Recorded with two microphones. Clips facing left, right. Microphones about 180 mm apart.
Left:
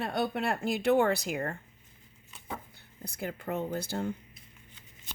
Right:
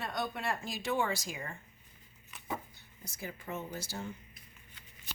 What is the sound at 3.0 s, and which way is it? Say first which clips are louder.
Speech: left 7 dB; 60° left (ahead or behind).